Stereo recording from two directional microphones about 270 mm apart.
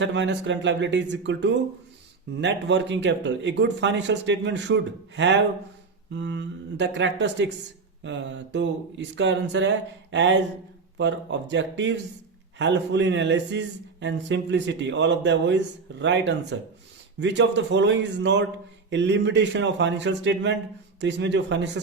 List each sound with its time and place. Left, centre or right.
0.0 s a man's voice: right